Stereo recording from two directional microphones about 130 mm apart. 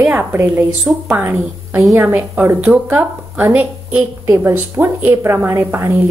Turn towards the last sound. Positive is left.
turn(degrees=-20)  # may be behind; listen again after turning